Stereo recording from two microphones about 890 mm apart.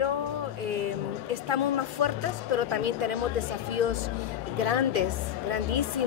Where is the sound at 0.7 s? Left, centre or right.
Right.